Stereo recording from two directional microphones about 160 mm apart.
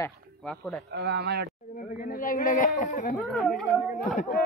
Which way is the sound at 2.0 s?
60° left (ahead or behind).